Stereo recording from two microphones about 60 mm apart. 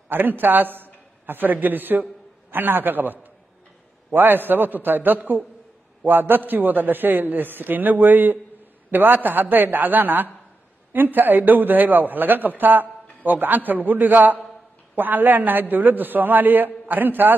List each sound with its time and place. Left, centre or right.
0.1 s a man's voice: right